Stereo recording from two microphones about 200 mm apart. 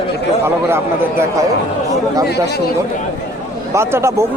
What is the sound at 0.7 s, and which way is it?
Speech, 10° right (ahead or behind).